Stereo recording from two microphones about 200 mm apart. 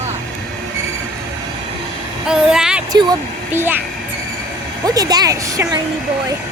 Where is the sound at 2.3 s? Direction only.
5° right (ahead or behind).